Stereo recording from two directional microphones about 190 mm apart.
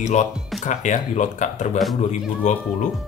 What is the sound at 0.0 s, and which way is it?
Speech, 40° left (ahead or behind).